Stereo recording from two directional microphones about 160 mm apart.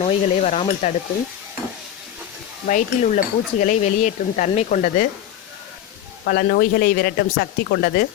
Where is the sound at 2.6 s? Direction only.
50° left (ahead or behind).